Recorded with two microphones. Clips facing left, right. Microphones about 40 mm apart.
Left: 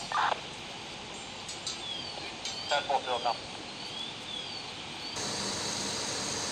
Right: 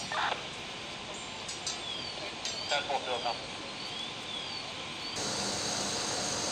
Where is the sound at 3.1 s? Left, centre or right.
Centre.